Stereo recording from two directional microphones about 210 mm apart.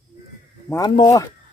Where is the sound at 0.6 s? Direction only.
15° left (ahead or behind).